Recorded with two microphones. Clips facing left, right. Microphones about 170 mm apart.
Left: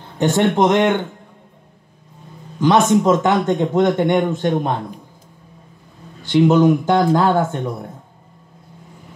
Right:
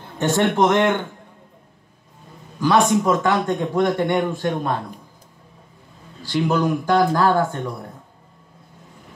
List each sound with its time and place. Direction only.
0.2 s speech: 15° left (ahead or behind)
2.6 s a man's voice: 20° left (ahead or behind)
6.2 s a man's voice: 20° left (ahead or behind)